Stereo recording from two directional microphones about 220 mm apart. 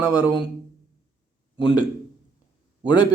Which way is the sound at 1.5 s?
25° left (ahead or behind).